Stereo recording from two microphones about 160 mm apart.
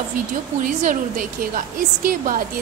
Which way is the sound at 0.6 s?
55° right (ahead or behind).